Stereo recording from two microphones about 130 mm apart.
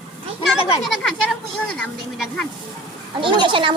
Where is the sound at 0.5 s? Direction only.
50° left (ahead or behind).